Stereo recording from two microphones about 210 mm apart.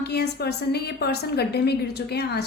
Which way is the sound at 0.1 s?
50° left (ahead or behind).